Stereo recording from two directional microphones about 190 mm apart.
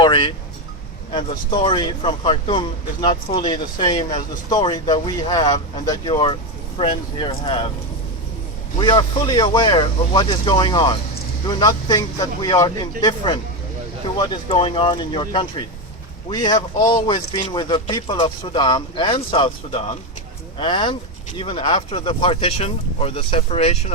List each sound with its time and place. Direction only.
0.0 s speech: 25° left (ahead or behind)
8.8 s speech: 20° left (ahead or behind)